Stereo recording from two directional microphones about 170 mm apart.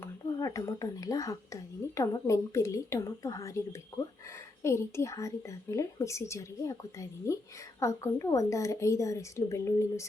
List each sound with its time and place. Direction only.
0.0 s a woman's voice: 20° left (ahead or behind)